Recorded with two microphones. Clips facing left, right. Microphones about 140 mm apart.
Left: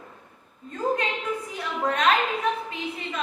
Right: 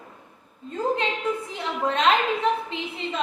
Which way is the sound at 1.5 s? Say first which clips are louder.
Right 1 dB; 25° right (ahead or behind).